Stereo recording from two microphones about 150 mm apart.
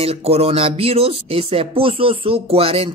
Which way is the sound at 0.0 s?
40° right (ahead or behind).